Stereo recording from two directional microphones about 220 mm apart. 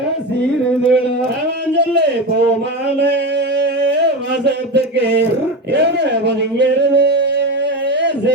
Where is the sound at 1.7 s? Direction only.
50° right (ahead or behind).